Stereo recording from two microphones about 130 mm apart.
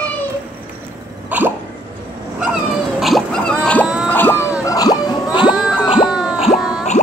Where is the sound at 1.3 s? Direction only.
10° right (ahead or behind).